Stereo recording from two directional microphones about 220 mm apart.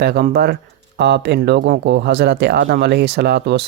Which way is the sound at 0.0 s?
45° right (ahead or behind).